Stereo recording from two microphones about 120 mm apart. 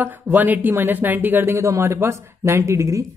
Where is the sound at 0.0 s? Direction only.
15° right (ahead or behind).